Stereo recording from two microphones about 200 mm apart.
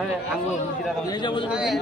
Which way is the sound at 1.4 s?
5° right (ahead or behind).